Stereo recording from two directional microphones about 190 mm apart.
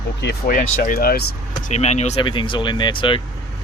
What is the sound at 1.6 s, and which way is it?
Speech, 35° left (ahead or behind).